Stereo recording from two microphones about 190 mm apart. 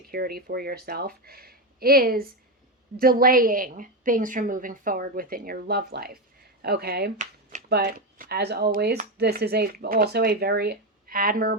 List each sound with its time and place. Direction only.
0.1 s a woman's voice: 50° right (ahead or behind)